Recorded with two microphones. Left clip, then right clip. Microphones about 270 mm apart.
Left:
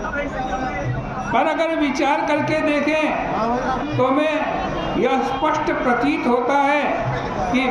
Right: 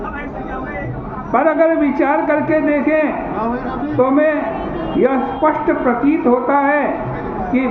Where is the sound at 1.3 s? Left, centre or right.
Centre.